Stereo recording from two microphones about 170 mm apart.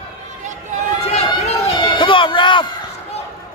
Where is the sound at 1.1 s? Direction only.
40° left (ahead or behind).